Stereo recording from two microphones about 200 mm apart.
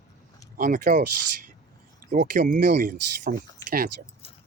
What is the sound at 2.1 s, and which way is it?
Speech, 45° right (ahead or behind).